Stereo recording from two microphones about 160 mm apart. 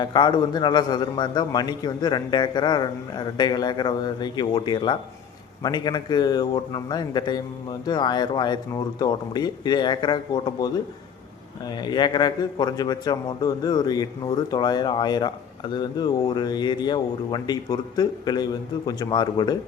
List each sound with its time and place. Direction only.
0.0 s a man's voice: 25° left (ahead or behind)